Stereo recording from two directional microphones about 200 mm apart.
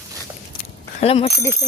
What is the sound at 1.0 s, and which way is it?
Speech, 30° left (ahead or behind).